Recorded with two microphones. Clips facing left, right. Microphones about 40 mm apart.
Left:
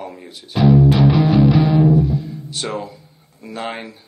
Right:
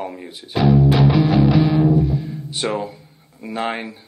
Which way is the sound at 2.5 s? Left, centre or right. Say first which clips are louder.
Right 3 dB; centre.